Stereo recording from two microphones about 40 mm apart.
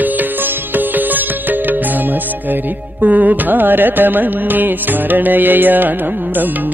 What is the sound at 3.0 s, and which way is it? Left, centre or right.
Carnatic music, right.